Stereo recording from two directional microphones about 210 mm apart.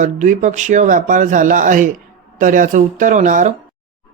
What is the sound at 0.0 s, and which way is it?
Speech, 35° right (ahead or behind).